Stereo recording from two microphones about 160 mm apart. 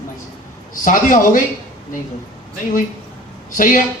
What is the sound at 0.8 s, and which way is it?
Speech, 55° left (ahead or behind).